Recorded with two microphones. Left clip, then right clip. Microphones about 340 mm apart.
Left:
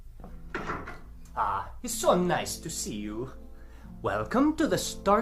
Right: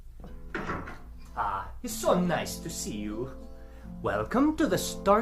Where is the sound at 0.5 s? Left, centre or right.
Centre.